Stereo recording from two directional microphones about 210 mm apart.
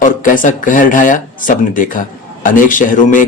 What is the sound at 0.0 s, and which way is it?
Speech, 40° left (ahead or behind).